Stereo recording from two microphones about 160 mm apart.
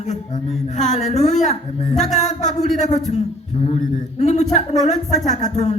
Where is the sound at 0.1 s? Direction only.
45° left (ahead or behind).